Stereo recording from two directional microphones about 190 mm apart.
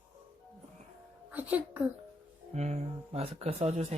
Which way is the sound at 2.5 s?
35° right (ahead or behind).